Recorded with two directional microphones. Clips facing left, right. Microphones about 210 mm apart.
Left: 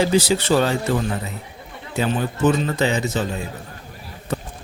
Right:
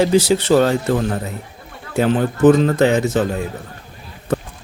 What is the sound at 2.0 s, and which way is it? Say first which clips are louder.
Speech: right 6 dB; 75° right (ahead or behind).